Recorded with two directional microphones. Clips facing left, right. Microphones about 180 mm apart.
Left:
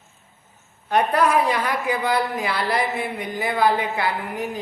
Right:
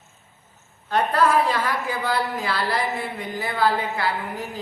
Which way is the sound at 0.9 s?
15° left (ahead or behind).